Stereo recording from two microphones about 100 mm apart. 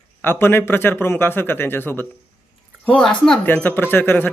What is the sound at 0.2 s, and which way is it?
Speech, 20° left (ahead or behind).